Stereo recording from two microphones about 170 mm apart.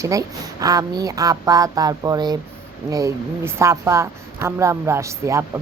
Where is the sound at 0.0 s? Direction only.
20° right (ahead or behind).